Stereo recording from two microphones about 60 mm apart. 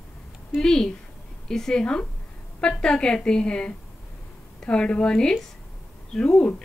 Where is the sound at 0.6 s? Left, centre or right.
Centre.